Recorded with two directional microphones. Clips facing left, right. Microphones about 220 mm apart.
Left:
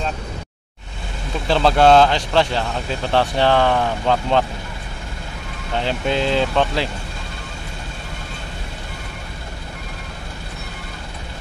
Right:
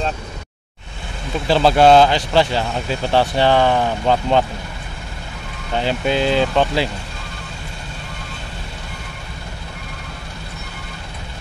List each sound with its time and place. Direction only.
1.5 s speech: 5° right (ahead or behind)
5.8 s speech: 5° right (ahead or behind)